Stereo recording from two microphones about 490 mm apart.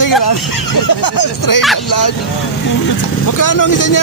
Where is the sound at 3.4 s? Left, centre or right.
Left.